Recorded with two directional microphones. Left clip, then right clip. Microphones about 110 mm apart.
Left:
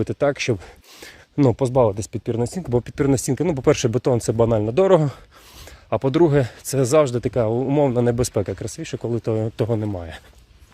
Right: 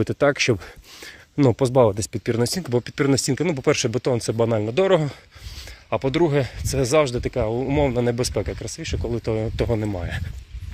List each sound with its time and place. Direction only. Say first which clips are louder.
0.0 s speech: right 2 dB; centre (ahead or behind)
1.5 s speech: right 1 dB; centre (ahead or behind)
2.6 s speech: left 4 dB; 35° left (ahead or behind)
3.5 s speech: left 4 dB; 90° left
9.1 s speech: left 2 dB; 60° left (ahead or behind)
9.8 s speech: right 1 dB; 20° left (ahead or behind)